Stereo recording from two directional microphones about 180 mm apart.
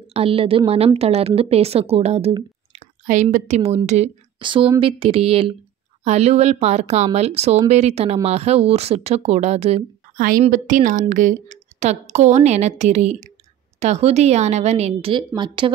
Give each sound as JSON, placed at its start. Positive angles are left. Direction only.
{"t": 0.1, "sound": "speech", "side_deg": -30}
{"t": 4.4, "sound": "a woman's voice", "side_deg": -25}